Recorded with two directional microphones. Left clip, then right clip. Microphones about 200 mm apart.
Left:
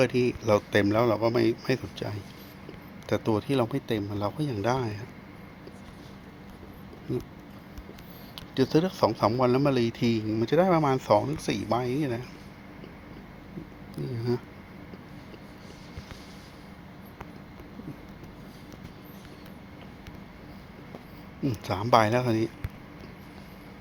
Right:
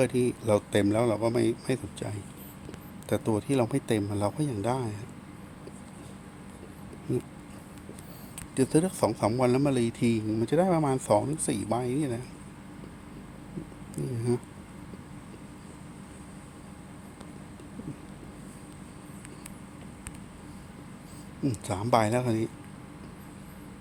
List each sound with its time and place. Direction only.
0.0 s a man's voice: 10° right (ahead or behind)
4.4 s a man's voice: 5° right (ahead or behind)
8.5 s a man's voice: 10° right (ahead or behind)
13.9 s cat: 20° right (ahead or behind)
21.4 s a man's voice: 10° right (ahead or behind)